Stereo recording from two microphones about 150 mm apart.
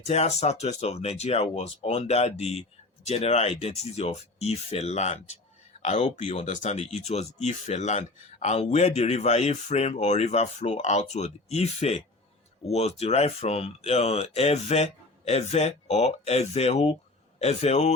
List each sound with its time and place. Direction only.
0.0 s speech: 45° left (ahead or behind)